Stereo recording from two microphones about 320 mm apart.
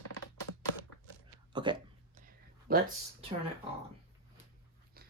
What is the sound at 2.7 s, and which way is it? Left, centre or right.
Speech, right.